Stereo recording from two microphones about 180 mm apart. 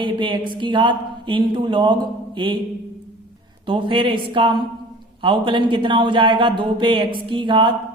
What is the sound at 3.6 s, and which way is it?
A woman's voice, 30° right (ahead or behind).